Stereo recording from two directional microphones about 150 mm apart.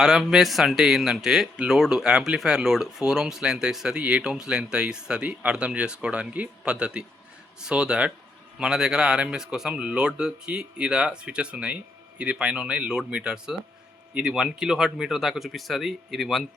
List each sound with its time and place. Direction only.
0.0 s speech: centre (ahead or behind)